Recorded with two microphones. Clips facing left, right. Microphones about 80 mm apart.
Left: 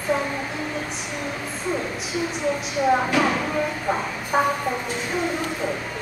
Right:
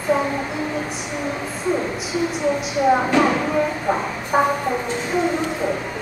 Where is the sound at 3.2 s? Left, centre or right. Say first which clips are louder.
Right 4 dB; centre.